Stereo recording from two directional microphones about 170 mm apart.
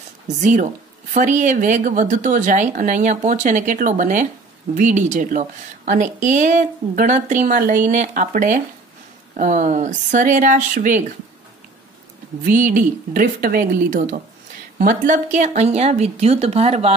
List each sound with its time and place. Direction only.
0.4 s speech: 45° right (ahead or behind)
12.4 s speech: 50° right (ahead or behind); by 16.9 s 35° right (ahead or behind)